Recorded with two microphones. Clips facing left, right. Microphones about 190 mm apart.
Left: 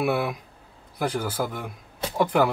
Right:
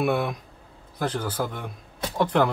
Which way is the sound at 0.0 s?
5° left (ahead or behind).